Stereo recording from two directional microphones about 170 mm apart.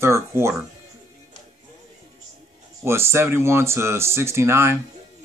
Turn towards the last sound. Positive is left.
turn(degrees=-15)  # may be behind; listen again after turning